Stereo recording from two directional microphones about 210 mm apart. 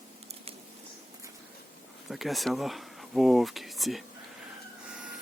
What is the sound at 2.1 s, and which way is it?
Speech, centre (ahead or behind).